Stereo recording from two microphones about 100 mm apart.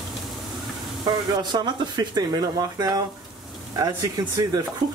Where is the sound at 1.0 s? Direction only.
45° right (ahead or behind).